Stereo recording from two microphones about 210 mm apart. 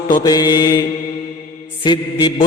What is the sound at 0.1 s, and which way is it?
Mantra, 20° left (ahead or behind).